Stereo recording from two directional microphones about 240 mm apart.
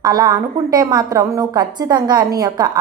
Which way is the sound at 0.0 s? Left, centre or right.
Centre.